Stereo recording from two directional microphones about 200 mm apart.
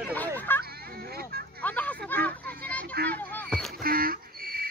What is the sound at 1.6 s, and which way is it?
Speech, 10° left (ahead or behind).